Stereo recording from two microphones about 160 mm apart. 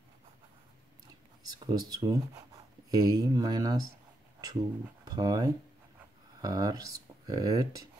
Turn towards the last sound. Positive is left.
turn(degrees=-20)  # may be behind; listen again after turning